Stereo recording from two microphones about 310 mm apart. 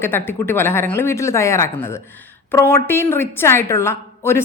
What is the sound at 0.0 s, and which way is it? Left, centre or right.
A woman's voice, centre.